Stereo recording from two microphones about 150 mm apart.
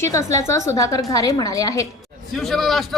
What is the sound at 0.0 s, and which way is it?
A woman's voice, 20° left (ahead or behind).